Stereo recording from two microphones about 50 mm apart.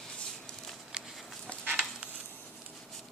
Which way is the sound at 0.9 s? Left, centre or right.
Centre.